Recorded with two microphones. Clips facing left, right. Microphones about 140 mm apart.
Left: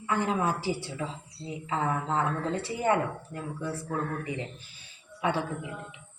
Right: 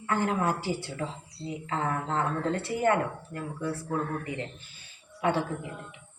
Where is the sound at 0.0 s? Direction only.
15° left (ahead or behind).